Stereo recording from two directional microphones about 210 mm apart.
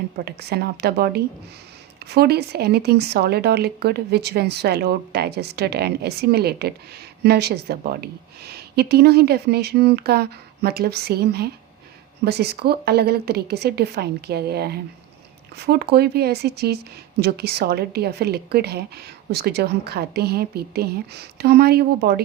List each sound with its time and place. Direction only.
0.3 s speech: 50° right (ahead or behind)